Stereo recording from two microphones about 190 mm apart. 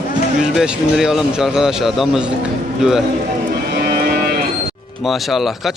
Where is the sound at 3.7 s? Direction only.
55° right (ahead or behind).